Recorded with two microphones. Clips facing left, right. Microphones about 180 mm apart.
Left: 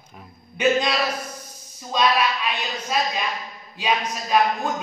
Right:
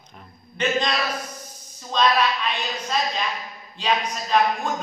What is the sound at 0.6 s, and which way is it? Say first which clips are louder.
A man's voice: left 3 dB; 10° left (ahead or behind).